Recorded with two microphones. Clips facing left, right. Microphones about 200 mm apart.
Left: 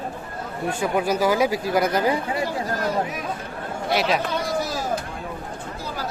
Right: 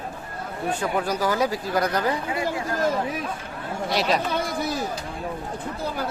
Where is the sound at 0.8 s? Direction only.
10° left (ahead or behind).